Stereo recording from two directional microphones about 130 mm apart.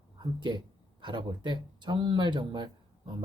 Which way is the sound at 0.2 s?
35° right (ahead or behind).